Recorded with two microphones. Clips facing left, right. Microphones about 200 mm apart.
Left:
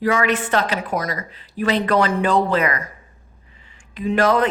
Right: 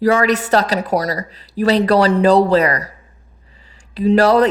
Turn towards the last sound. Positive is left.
turn(degrees=-35)  # may be behind; listen again after turning